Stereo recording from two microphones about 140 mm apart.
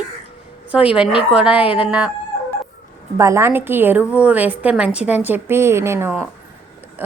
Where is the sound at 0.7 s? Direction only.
10° right (ahead or behind).